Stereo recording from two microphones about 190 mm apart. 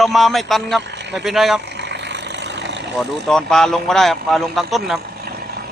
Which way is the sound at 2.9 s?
5° left (ahead or behind).